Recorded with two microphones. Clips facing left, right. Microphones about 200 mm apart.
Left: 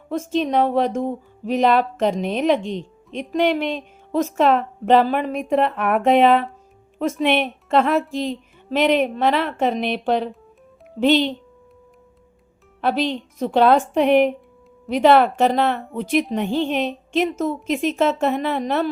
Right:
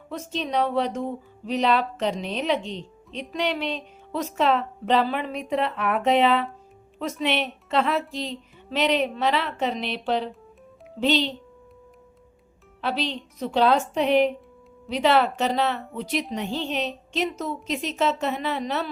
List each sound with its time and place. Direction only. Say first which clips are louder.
0.1 s speech: left 7 dB; 50° left (ahead or behind)
12.8 s speech: left 6 dB; 50° left (ahead or behind)